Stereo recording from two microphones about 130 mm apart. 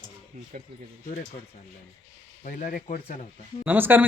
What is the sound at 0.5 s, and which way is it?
Speech, 90° right.